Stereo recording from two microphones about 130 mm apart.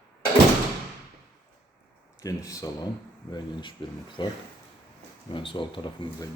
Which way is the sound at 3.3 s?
40° left (ahead or behind).